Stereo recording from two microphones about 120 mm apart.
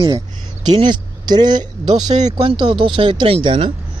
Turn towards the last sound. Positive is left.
turn(degrees=-50)  # may be behind; listen again after turning